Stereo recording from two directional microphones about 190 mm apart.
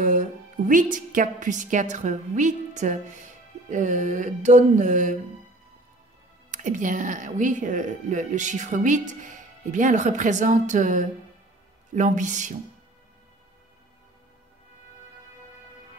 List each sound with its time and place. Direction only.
0.0 s a woman's voice: 45° right (ahead or behind)
6.5 s a woman's voice: 40° right (ahead or behind)